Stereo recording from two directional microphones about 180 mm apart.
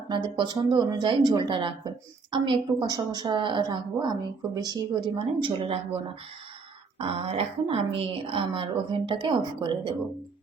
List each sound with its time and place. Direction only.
0.1 s a woman's voice: 25° right (ahead or behind)
7.0 s a woman's voice: 30° right (ahead or behind)